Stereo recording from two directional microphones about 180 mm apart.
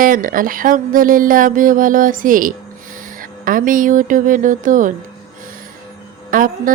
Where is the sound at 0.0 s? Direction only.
50° right (ahead or behind).